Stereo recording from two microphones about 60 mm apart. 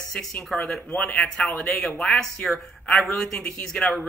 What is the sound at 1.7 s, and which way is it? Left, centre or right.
Speech, centre.